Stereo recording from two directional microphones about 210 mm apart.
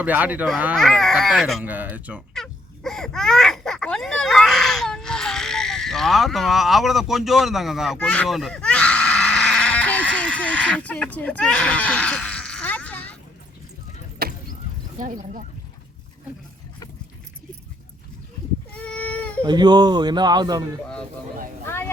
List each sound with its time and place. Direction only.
0.0 s speech: 5° right (ahead or behind)
7.9 s a sound: 5° left (ahead or behind)
14.2 s chop: 45° right (ahead or behind)
14.9 s speech: 35° right (ahead or behind)
18.8 s baby cry: 5° left (ahead or behind)
19.4 s speech: 20° right (ahead or behind)